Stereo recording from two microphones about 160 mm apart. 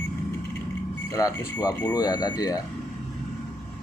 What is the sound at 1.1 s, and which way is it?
Speech, 20° left (ahead or behind).